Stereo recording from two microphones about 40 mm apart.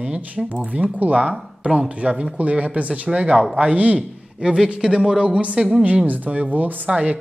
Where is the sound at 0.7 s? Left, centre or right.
Right.